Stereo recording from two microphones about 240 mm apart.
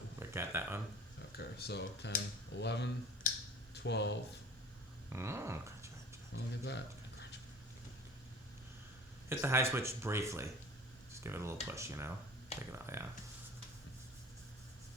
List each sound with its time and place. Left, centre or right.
0.2 s a sound: centre
1.4 s speech: left
3.3 s finger snapping: left
3.8 s speech: left
5.0 s a sound: centre
6.3 s speech: left
9.3 s speech: centre